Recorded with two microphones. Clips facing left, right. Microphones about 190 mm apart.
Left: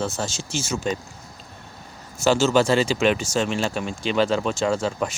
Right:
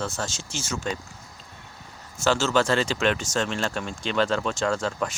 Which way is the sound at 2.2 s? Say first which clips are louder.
Left 4 dB; 10° left (ahead or behind).